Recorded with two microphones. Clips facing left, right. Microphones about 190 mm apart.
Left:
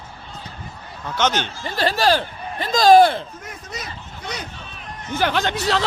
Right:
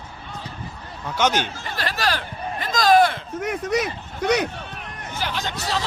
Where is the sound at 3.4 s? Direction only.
70° right (ahead or behind).